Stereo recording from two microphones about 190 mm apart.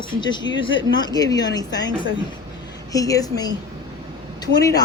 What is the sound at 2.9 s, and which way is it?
Speech, 20° left (ahead or behind).